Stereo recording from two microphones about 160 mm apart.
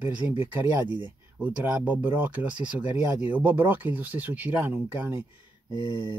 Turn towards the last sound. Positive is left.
turn(degrees=25)  # may be behind; listen again after turning